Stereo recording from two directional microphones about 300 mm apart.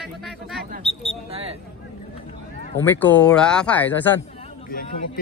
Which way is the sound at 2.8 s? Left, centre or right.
Centre.